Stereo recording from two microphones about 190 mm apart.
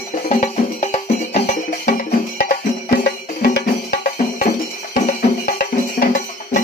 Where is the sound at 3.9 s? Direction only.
50° left (ahead or behind).